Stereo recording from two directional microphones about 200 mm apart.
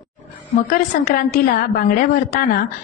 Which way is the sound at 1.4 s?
45° left (ahead or behind).